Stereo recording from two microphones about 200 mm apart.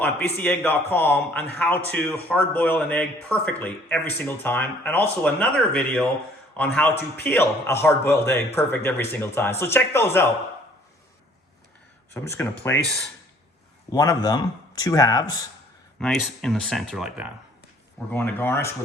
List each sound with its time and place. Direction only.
0.0 s a man's voice: 10° left (ahead or behind)
12.1 s speech: 15° left (ahead or behind)
13.9 s speech: 15° left (ahead or behind)
16.0 s speech: centre (ahead or behind)
18.1 s speech: 10° left (ahead or behind)